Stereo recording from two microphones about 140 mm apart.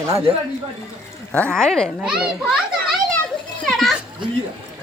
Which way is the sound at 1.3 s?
10° left (ahead or behind).